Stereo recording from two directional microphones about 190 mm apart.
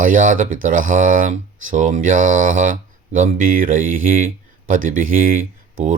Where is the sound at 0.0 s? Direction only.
45° right (ahead or behind).